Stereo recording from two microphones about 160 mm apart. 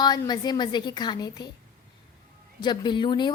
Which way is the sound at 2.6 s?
30° left (ahead or behind).